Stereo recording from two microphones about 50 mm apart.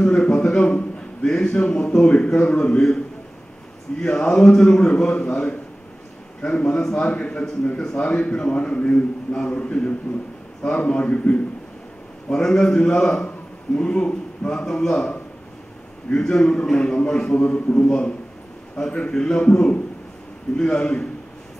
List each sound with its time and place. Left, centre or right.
0.0 s a sound: left
0.6 s a man's voice: left
4.0 s a man's voice: centre
12.3 s a man's voice: centre
16.1 s a man's voice: centre